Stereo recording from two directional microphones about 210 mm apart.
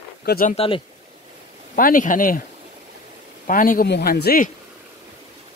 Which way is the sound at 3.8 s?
50° left (ahead or behind).